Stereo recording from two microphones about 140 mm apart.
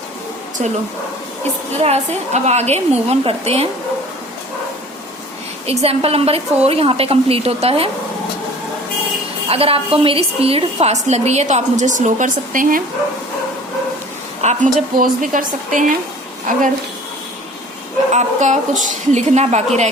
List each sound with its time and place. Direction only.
0.6 s a woman's voice: 55° right (ahead or behind)
1.8 s a woman's voice: 50° right (ahead or behind)
5.6 s a woman's voice: 45° right (ahead or behind)
9.5 s a woman's voice: 45° right (ahead or behind); by 12.8 s 70° right (ahead or behind)
14.4 s a woman's voice: 75° right (ahead or behind)
18.1 s a woman's voice: 55° right (ahead or behind)